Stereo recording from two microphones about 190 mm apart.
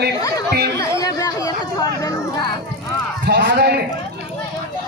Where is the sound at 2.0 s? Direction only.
20° left (ahead or behind).